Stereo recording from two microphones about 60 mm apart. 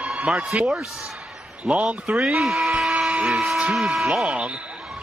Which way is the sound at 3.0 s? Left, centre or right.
Centre.